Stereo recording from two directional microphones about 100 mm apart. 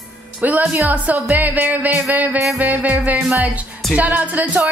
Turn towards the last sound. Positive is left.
turn(degrees=-15)  # may be behind; listen again after turning